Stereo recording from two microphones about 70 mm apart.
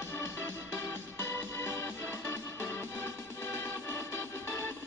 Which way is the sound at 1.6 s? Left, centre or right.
Left.